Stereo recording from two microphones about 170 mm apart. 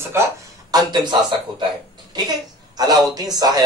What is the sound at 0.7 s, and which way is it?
Speech, 25° right (ahead or behind).